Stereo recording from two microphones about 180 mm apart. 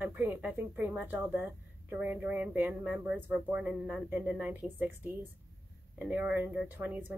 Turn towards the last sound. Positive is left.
turn(degrees=-10)  # may be behind; listen again after turning